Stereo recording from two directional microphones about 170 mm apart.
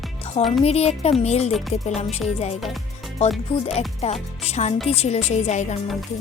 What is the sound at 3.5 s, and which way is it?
A woman's voice, 35° left (ahead or behind).